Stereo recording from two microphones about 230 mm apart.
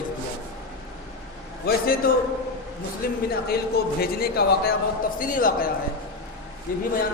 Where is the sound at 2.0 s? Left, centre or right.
Left.